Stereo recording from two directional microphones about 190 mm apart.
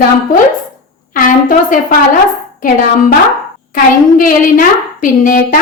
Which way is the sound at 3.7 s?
45° left (ahead or behind).